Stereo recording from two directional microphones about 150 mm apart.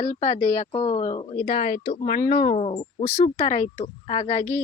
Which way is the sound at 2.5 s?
45° left (ahead or behind).